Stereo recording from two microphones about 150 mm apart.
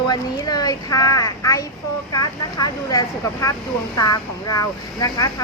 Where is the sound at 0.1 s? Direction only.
25° left (ahead or behind).